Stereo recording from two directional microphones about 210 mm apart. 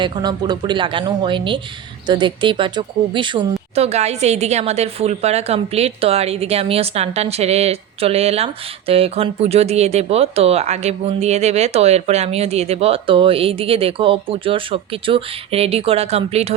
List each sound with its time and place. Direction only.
0.0 s speech: 20° right (ahead or behind)